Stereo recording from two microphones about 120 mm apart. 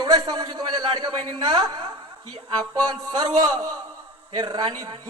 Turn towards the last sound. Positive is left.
turn(degrees=-35)  # may be behind; listen again after turning